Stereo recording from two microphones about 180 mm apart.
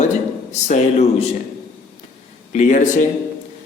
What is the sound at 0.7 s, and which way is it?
Speech, 40° left (ahead or behind).